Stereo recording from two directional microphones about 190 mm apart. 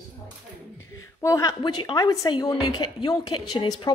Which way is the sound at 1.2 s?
15° left (ahead or behind).